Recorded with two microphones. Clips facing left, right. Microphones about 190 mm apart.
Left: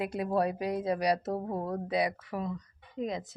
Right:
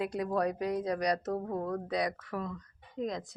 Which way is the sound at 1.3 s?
25° left (ahead or behind).